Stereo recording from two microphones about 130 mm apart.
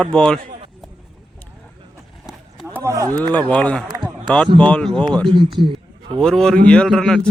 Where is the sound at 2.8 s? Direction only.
25° right (ahead or behind).